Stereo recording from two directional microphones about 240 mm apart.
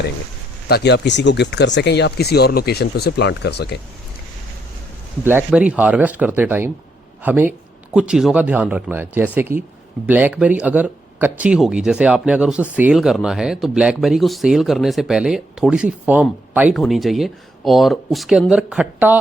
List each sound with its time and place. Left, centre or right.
0.7 s speech: left
5.2 s speech: centre